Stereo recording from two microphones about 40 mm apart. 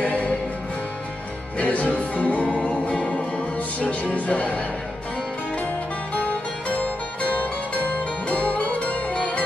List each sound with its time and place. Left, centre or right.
0.0 s music: left
1.6 s music: left
6.1 s music: left